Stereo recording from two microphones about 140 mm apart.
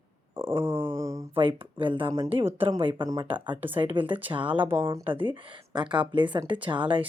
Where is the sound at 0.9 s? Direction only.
20° right (ahead or behind).